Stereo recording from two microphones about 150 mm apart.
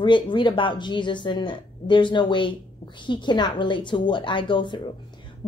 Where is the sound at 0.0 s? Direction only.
30° left (ahead or behind).